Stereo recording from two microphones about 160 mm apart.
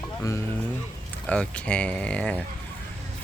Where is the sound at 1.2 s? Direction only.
5° left (ahead or behind).